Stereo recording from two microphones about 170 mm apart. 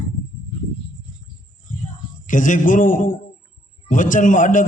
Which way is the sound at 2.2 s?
50° left (ahead or behind).